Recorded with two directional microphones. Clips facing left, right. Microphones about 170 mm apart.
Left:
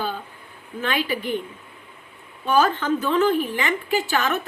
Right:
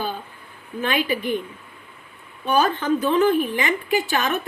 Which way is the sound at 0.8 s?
15° right (ahead or behind).